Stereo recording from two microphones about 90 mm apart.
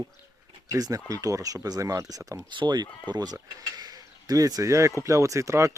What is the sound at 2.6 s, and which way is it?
Speech, 55° right (ahead or behind).